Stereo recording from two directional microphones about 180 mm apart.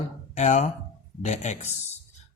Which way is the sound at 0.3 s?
40° left (ahead or behind).